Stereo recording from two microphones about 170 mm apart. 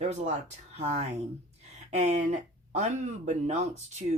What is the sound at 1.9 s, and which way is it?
Speech, 40° right (ahead or behind).